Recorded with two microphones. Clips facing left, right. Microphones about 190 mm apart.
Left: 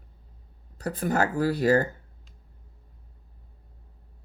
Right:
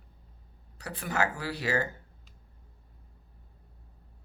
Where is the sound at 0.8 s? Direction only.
45° left (ahead or behind).